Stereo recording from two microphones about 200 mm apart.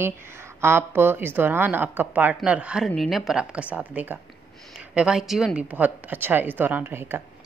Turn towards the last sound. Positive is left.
turn(degrees=-10)  # may be behind; listen again after turning